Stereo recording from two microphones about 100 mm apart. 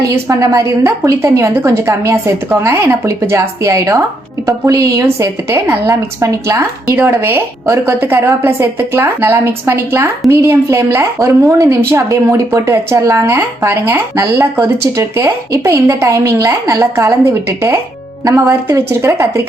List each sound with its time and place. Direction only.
0.1 s a woman's voice: 35° right (ahead or behind)
14.2 s a woman's voice: 35° right (ahead or behind)
18.3 s a woman's voice: 30° right (ahead or behind)